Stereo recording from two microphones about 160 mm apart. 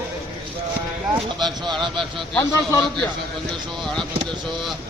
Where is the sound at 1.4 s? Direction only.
30° right (ahead or behind).